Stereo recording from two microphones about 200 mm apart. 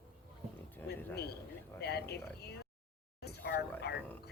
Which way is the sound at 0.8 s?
10° left (ahead or behind).